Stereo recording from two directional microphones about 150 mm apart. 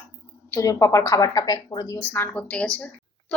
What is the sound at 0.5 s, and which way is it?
A woman's voice, 20° left (ahead or behind).